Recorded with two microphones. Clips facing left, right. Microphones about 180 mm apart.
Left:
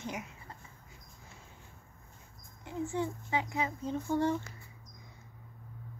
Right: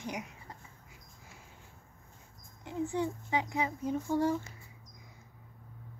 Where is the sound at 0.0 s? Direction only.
15° right (ahead or behind).